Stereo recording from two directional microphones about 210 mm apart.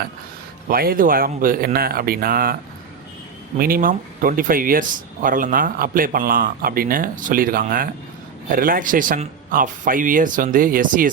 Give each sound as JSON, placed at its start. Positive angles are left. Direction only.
{"t": 0.7, "sound": "speech", "side_deg": -45}
{"t": 3.6, "sound": "speech", "side_deg": -40}